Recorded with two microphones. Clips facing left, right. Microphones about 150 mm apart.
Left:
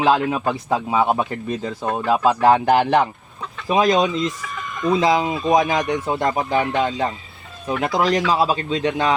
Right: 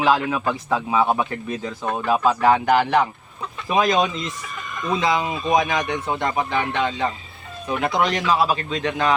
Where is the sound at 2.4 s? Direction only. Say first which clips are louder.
Left 2 dB; 40° left (ahead or behind).